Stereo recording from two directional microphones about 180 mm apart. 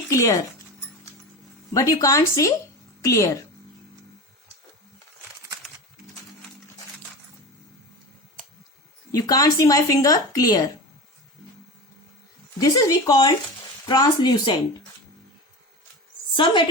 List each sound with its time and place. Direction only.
0.1 s speech: 15° left (ahead or behind)
1.7 s speech: 15° left (ahead or behind)
9.1 s speech: 20° left (ahead or behind)
12.5 s speech: 20° left (ahead or behind)
16.3 s a woman's voice: 25° left (ahead or behind)